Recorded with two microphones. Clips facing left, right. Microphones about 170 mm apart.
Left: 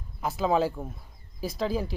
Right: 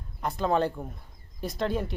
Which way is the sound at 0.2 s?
5° left (ahead or behind).